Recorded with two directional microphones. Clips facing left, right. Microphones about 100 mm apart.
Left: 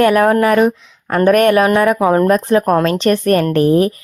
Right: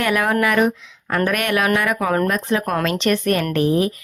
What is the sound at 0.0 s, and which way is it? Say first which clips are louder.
Speech: left 8 dB; 40° left (ahead or behind).